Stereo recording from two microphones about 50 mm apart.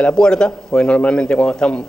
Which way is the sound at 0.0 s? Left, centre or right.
Centre.